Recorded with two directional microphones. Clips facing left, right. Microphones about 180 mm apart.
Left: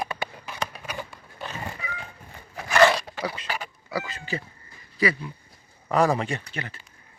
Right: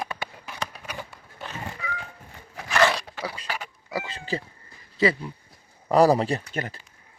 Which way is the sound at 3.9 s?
20° right (ahead or behind).